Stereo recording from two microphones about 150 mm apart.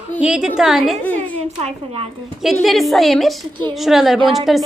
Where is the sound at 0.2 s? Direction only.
5° right (ahead or behind).